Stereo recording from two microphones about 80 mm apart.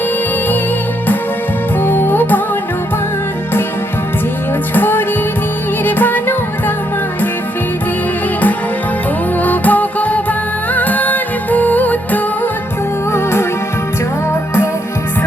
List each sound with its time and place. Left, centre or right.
1.8 s music: left
4.7 s music: left
9.4 s music: left
13.1 s music: left